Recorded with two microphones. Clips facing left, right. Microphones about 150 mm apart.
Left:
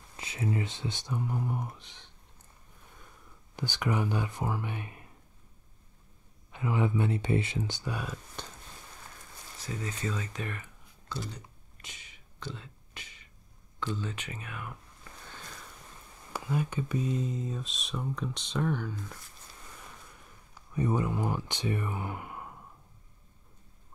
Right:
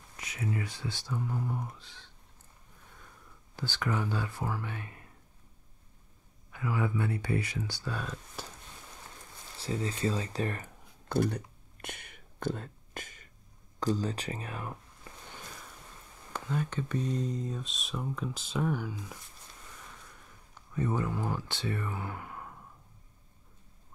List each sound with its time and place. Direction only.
0.2 s speech: 30° left (ahead or behind)
3.5 s speech: 15° left (ahead or behind)
6.5 s speech: 20° left (ahead or behind)
9.6 s speech: 30° right (ahead or behind)
11.1 s whispering: 55° right (ahead or behind)
13.7 s speech: 40° right (ahead or behind)
16.3 s speech: 10° left (ahead or behind); by 19.1 s 10° right (ahead or behind)
20.5 s speech: 15° left (ahead or behind)